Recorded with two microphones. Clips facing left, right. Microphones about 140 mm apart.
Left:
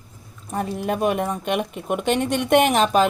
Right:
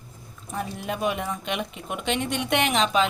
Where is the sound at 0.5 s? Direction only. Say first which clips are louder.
Left 6 dB; 50° left (ahead or behind).